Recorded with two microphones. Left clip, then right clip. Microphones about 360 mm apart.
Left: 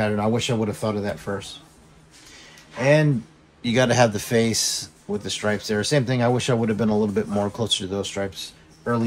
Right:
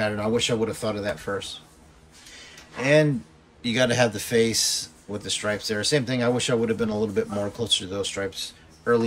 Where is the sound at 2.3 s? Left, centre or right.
Centre.